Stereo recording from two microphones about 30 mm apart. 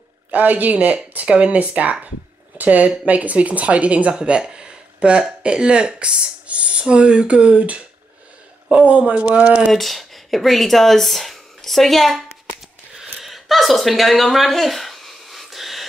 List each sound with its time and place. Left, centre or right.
0.3 s speech: right
1.2 s speech: right
4.1 s speech: right
6.4 s speech: right
8.8 s speech: right
9.2 s speech: right
9.7 s speech: centre
13.2 s a sound: centre